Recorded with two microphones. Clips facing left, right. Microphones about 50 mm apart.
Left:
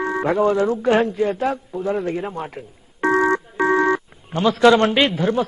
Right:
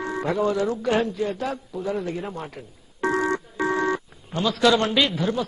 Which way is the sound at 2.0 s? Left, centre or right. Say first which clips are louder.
Left 5 dB; left.